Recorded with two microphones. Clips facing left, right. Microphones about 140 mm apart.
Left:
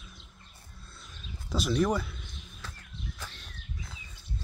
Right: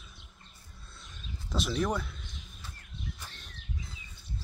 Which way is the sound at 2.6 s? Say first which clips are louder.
Left 5 dB; 90° left.